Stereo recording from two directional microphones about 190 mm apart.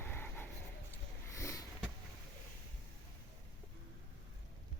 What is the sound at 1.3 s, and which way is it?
Sniff, 15° left (ahead or behind).